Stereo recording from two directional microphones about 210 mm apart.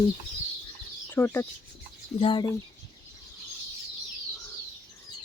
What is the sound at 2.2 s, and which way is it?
Speech, 20° left (ahead or behind).